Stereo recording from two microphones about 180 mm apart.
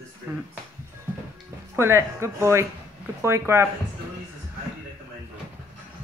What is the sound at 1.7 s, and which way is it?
Speech, 15° right (ahead or behind).